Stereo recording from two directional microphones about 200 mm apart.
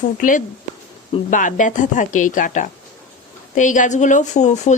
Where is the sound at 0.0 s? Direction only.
40° left (ahead or behind).